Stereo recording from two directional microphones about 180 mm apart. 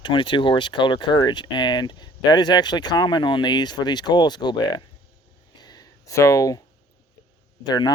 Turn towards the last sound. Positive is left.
turn(degrees=25)  # may be behind; listen again after turning